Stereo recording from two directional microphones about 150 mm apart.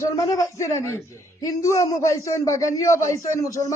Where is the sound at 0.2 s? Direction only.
20° left (ahead or behind).